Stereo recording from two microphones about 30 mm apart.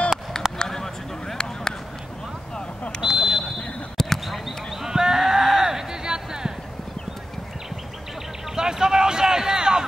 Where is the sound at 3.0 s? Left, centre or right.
Right.